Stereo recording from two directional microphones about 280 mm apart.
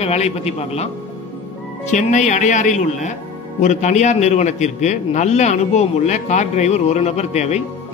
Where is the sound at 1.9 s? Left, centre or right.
Left.